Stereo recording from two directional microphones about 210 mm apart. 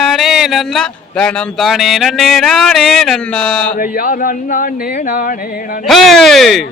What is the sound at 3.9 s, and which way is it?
Speech, 40° left (ahead or behind).